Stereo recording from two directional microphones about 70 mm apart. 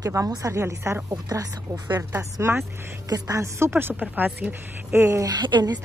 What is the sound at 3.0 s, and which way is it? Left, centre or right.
Speech, right.